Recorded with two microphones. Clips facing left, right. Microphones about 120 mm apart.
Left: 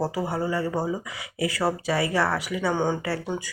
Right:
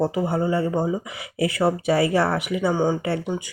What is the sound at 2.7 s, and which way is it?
Speech, 10° right (ahead or behind).